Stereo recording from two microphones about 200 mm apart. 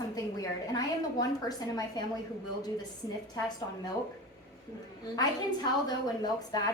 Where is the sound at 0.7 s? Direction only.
20° left (ahead or behind).